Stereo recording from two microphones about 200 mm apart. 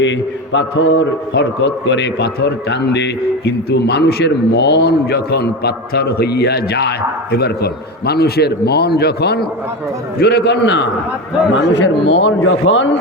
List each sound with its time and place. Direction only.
0.0 s a man's voice: 65° left (ahead or behind)